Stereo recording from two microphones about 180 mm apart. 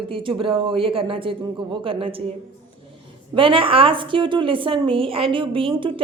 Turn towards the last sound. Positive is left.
turn(degrees=-30)  # may be behind; listen again after turning